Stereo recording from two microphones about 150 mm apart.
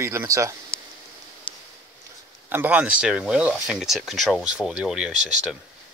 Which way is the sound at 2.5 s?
10° right (ahead or behind).